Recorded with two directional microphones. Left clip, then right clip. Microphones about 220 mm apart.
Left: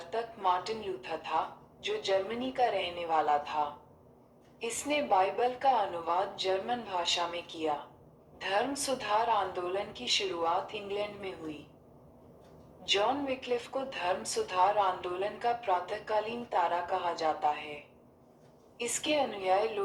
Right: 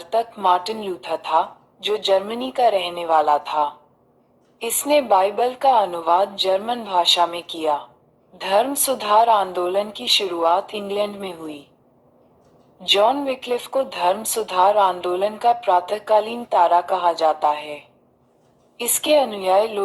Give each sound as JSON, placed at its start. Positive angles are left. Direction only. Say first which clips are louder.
{"t": 0.0, "sound": "a woman's voice", "louder": "right 12 dB", "side_deg": -45}
{"t": 12.8, "sound": "a woman's voice", "louder": "right 13 dB", "side_deg": -45}
{"t": 18.8, "sound": "a woman's voice", "louder": "right 13 dB", "side_deg": -45}